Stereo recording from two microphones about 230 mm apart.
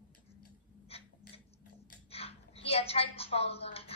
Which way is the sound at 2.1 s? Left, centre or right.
Left.